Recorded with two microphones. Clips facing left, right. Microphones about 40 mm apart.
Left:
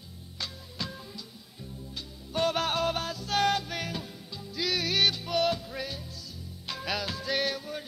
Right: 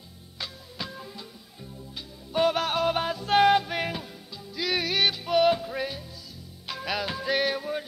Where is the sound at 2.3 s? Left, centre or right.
Centre.